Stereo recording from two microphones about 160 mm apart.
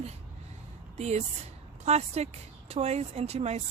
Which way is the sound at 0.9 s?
45° right (ahead or behind).